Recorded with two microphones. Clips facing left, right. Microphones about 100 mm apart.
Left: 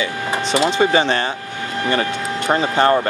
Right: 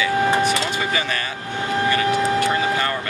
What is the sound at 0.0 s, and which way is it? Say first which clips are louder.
Speech: right 4 dB; 25° left (ahead or behind).